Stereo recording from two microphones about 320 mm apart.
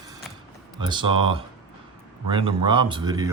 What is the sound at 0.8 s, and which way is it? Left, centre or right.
A man's voice, centre.